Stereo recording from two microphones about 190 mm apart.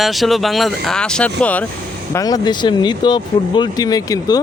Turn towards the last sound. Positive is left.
turn(degrees=20)  # may be behind; listen again after turning